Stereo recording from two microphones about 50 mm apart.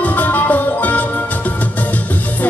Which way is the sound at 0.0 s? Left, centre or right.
Left.